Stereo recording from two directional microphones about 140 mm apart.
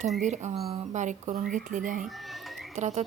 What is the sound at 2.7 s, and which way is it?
Speech, 55° right (ahead or behind).